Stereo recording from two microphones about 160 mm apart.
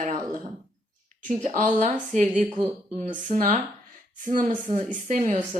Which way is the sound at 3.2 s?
50° right (ahead or behind).